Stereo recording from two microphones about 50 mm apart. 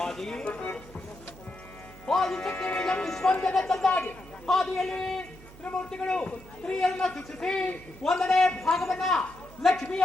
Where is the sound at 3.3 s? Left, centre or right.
Left.